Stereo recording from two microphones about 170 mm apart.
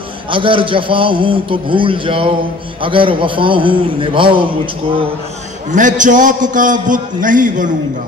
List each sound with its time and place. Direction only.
0.3 s a man's voice: 30° right (ahead or behind)
5.7 s a man's voice: 50° right (ahead or behind)